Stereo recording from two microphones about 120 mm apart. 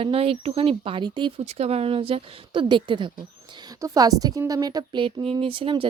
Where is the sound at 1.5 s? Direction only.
60° right (ahead or behind); by 3.1 s 45° right (ahead or behind).